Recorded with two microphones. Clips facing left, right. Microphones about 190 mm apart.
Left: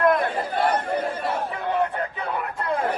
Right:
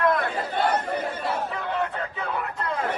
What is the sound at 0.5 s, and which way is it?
Chatter, 25° right (ahead or behind).